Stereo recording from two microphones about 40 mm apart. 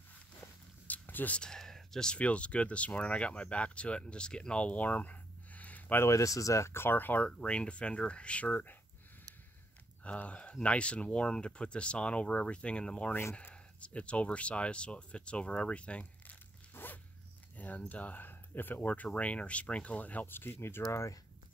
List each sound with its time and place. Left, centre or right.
0.8 s a sound: left
1.4 s a sound: centre
2.1 s speech: left
6.7 s speech: left
7.2 s speech: left
8.5 s speech: left
10.0 s speech: left
16.7 s zipper: left
17.6 s speech: left
19.1 s speech: left
20.2 s speech: left